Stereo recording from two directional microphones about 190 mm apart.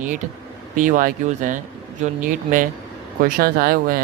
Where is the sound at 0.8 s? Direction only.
45° right (ahead or behind).